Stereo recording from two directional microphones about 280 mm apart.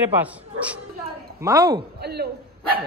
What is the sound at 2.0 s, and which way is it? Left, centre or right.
Speech, right.